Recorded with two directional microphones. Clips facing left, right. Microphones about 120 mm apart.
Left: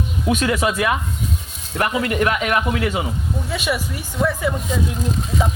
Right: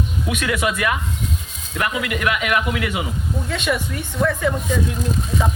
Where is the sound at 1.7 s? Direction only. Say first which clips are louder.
Left 3 dB; 35° left (ahead or behind).